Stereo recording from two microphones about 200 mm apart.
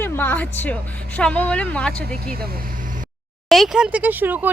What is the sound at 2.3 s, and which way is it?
Speech, 50° right (ahead or behind).